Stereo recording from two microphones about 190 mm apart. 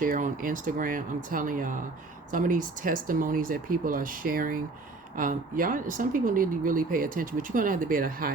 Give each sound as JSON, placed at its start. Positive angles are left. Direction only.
{"t": 0.0, "sound": "speech", "side_deg": -45}